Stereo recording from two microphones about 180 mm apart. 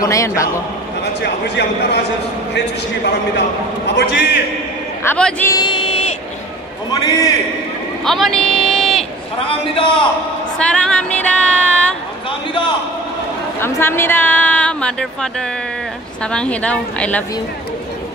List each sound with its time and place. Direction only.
0.0 s a woman's voice: 15° left (ahead or behind)
1.2 s a man's voice: 70° left (ahead or behind)
5.0 s a woman's voice: 10° left (ahead or behind)
5.5 s a sound: 25° left (ahead or behind)
6.9 s a man's voice: 20° left (ahead or behind)
8.0 s speech: centre (ahead or behind)
8.5 s a sound: centre (ahead or behind)
9.5 s a man's voice: 30° left (ahead or behind)
10.6 s female singing: 5° left (ahead or behind)
13.6 s a woman's voice: 15° left (ahead or behind)